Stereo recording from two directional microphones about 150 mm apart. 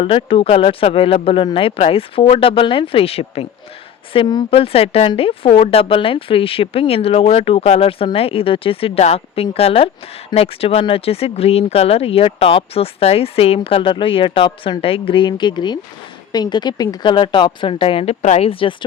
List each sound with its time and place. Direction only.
0.0 s speech: 35° left (ahead or behind)